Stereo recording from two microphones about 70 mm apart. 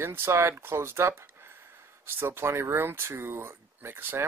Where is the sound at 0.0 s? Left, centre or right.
Right.